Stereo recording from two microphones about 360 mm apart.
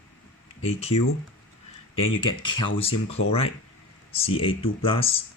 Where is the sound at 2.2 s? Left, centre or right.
Centre.